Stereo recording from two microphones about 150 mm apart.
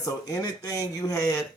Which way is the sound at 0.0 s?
20° left (ahead or behind).